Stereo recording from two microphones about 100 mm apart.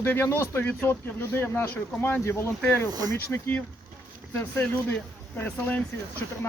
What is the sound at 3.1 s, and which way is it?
Speech, 20° left (ahead or behind).